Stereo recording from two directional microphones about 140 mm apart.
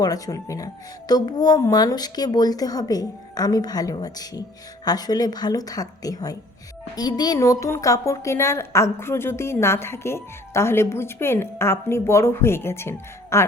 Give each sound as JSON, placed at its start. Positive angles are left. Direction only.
{"t": 0.0, "sound": "a woman's voice", "side_deg": 25}